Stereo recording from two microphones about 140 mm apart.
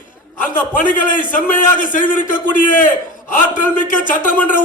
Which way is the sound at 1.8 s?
70° left (ahead or behind).